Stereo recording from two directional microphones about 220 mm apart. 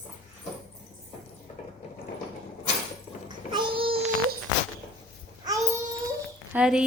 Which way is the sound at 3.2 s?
20° right (ahead or behind).